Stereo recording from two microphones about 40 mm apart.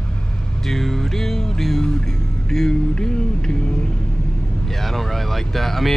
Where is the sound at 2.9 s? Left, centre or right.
Centre.